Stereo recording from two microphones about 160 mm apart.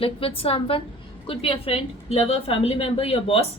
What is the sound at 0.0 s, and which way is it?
Speech, 35° left (ahead or behind).